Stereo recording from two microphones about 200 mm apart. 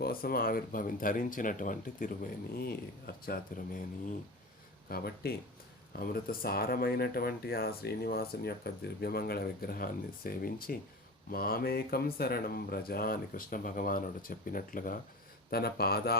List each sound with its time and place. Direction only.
0.0 s speech: 45° left (ahead or behind)
4.9 s speech: 50° left (ahead or behind)